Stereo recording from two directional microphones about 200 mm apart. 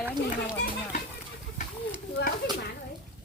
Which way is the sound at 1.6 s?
40° left (ahead or behind).